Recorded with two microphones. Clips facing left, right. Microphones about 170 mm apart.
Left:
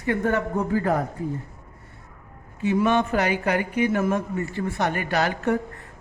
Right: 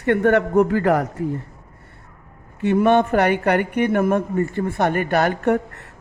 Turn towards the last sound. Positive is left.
turn(degrees=-70)  # may be behind; listen again after turning